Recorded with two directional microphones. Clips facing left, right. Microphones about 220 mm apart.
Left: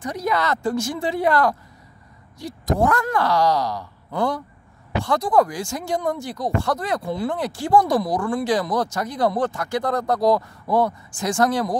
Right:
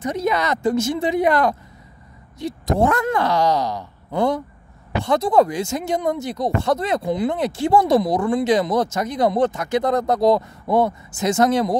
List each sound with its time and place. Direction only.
0.0 s speech: 25° right (ahead or behind)